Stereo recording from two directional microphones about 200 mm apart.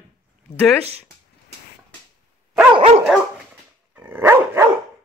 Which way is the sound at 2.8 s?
30° right (ahead or behind).